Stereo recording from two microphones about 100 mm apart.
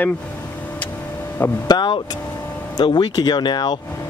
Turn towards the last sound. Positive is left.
turn(degrees=45)  # may be behind; listen again after turning